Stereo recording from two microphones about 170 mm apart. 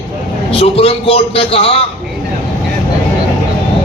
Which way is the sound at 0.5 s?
35° left (ahead or behind).